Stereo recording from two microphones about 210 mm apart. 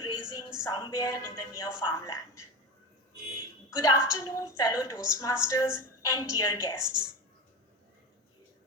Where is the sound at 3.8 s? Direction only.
15° left (ahead or behind).